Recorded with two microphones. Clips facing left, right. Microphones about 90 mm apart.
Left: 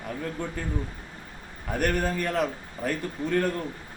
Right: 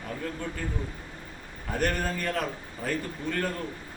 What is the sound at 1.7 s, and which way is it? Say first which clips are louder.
A man's voice: left 2 dB; 10° left (ahead or behind).